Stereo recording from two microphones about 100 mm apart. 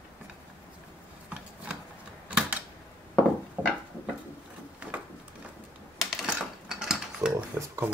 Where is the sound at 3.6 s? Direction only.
15° right (ahead or behind).